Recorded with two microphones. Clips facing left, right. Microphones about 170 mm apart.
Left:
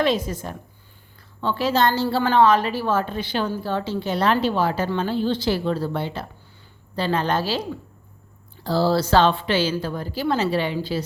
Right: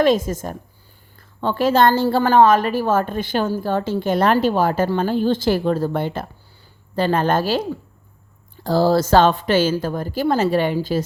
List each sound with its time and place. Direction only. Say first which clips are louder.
0.0 s a woman's voice: right 5 dB; 45° right (ahead or behind)